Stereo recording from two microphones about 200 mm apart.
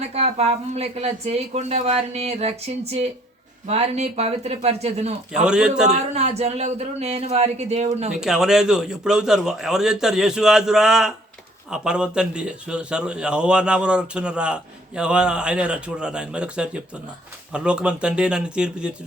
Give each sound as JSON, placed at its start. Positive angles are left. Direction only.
{"t": 0.1, "sound": "speech", "side_deg": -30}
{"t": 5.3, "sound": "speech", "side_deg": -5}
{"t": 5.9, "sound": "speech", "side_deg": -35}
{"t": 8.1, "sound": "speech", "side_deg": -5}